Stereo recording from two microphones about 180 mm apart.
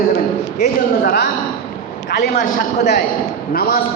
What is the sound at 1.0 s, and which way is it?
A man's voice, 60° left (ahead or behind).